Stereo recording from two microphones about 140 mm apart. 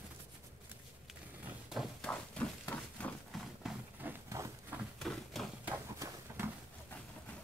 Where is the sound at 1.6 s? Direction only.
Centre (ahead or behind).